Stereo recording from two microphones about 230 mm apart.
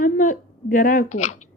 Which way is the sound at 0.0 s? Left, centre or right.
Left.